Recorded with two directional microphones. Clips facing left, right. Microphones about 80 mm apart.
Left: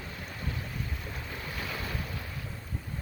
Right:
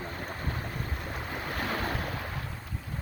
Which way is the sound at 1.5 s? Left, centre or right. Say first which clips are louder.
Right 6 dB; right.